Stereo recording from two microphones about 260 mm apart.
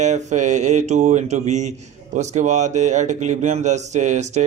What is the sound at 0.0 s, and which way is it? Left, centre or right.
Speech, right.